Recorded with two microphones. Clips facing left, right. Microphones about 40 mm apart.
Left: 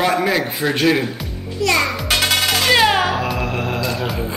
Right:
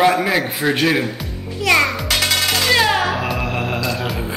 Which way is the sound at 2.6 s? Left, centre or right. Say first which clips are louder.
Left 2 dB; centre.